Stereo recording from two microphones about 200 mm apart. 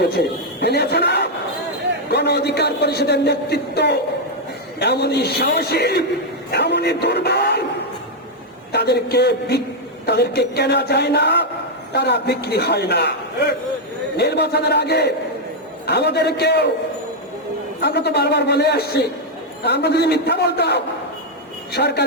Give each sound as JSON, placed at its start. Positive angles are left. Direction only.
{"t": 0.1, "sound": "a man's voice", "side_deg": 55}
{"t": 8.7, "sound": "a man's voice", "side_deg": 55}
{"t": 14.2, "sound": "a man's voice", "side_deg": 55}
{"t": 17.7, "sound": "a man's voice", "side_deg": 55}